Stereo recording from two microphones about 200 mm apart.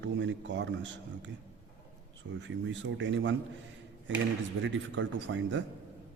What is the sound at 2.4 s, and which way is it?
Speech, 65° right (ahead or behind).